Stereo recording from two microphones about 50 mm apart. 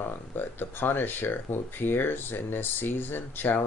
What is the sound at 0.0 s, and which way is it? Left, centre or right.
Speech, left.